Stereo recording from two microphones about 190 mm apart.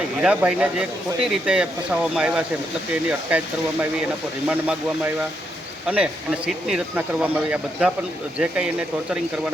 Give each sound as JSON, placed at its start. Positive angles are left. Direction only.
{"t": 0.2, "sound": "speech", "side_deg": -5}